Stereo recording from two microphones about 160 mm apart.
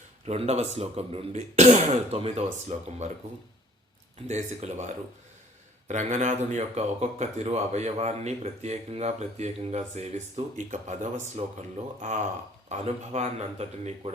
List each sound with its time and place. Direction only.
0.3 s speech: 40° right (ahead or behind)
4.3 s speech: 45° right (ahead or behind)
5.9 s speech: 50° right (ahead or behind)
12.6 s speech: 45° right (ahead or behind)